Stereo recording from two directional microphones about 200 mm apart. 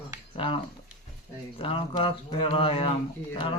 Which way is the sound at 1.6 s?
25° left (ahead or behind).